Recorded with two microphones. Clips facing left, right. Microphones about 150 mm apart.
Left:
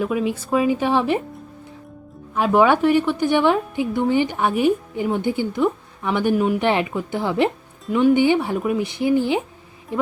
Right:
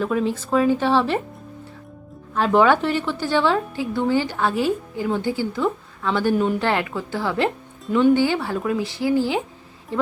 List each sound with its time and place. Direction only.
0.0 s a woman's voice: 10° left (ahead or behind)
2.3 s a woman's voice: 10° left (ahead or behind)
7.9 s a woman's voice: 5° left (ahead or behind)
8.1 s speech: 20° left (ahead or behind)